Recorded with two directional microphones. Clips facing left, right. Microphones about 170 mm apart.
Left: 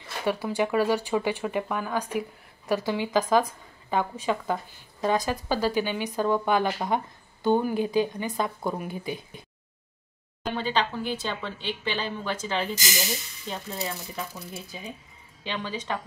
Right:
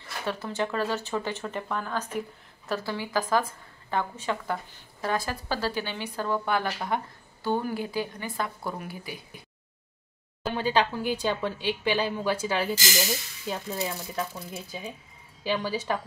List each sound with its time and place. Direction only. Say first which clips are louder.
0.2 s a woman's voice: left 4 dB; 10° left (ahead or behind)
10.4 s speech: right 2 dB; 10° right (ahead or behind)